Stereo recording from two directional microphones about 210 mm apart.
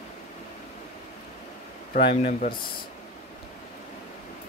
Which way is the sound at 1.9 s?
55° left (ahead or behind).